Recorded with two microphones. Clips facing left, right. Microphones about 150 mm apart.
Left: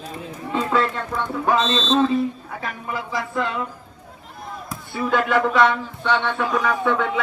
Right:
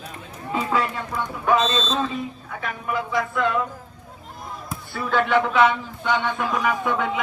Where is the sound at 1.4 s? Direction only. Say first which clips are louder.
Even; 30° left (ahead or behind).